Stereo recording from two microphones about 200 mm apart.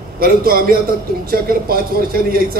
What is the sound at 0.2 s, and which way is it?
Speech, 50° right (ahead or behind).